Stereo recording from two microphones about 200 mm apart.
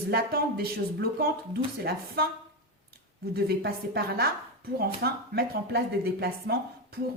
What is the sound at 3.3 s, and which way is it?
Speech, 50° right (ahead or behind).